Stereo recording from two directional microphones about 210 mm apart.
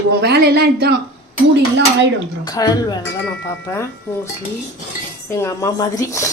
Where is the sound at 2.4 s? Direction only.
20° left (ahead or behind).